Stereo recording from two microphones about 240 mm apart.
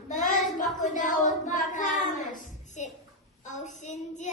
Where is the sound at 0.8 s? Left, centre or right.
Left.